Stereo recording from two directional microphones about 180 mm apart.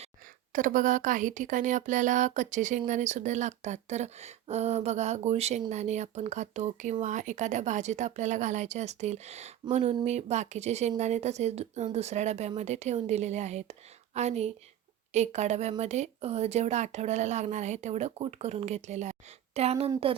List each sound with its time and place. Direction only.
0.5 s speech: 45° right (ahead or behind)